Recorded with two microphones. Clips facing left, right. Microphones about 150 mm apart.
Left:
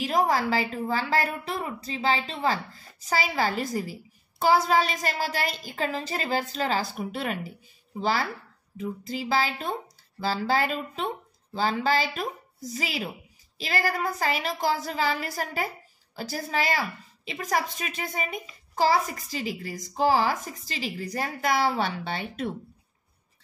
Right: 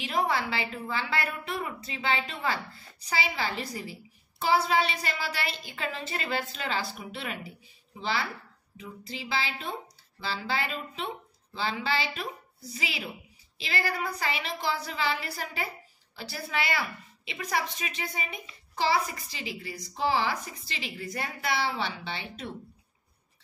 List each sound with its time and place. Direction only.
0.0 s a woman's voice: 40° left (ahead or behind)